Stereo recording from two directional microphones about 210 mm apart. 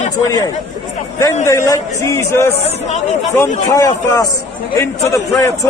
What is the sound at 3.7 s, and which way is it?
Speech, 15° left (ahead or behind).